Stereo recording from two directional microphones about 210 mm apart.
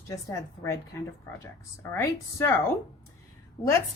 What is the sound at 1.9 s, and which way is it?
Speech, 10° left (ahead or behind).